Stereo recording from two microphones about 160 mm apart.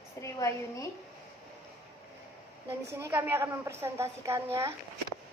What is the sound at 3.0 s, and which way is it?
A woman's voice, 15° right (ahead or behind).